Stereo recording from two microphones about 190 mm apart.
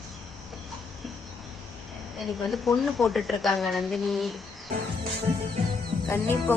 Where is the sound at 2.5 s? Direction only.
Centre (ahead or behind).